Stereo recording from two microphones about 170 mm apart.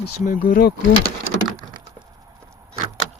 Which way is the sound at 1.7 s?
20° right (ahead or behind).